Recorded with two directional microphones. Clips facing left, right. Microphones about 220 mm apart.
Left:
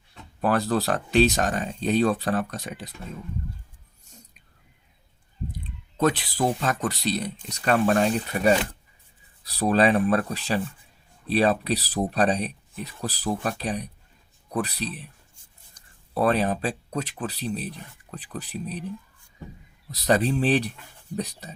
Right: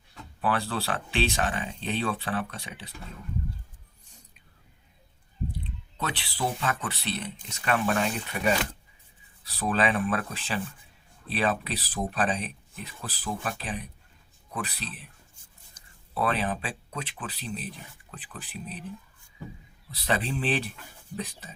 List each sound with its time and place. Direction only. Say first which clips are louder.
0.4 s speech: left 6 dB; 40° left (ahead or behind)
5.5 s speech: right 1 dB; 45° left (ahead or behind)
16.1 s speech: left 6 dB; 40° left (ahead or behind)
19.9 s speech: left 7 dB; 40° left (ahead or behind)